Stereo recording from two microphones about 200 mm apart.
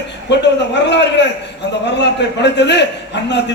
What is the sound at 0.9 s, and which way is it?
A man's voice, 60° left (ahead or behind).